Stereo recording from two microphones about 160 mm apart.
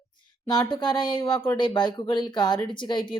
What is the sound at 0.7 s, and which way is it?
Speech, 30° left (ahead or behind).